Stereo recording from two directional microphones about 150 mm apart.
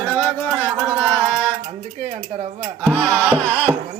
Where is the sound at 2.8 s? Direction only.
5° left (ahead or behind).